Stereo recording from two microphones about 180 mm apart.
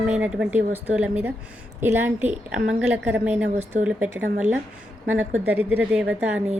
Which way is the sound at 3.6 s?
40° right (ahead or behind).